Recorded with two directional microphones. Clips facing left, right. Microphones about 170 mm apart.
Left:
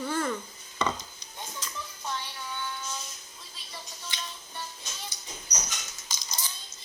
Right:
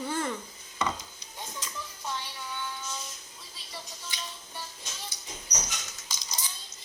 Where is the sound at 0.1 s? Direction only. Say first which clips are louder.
Left 2 dB; 20° right (ahead or behind).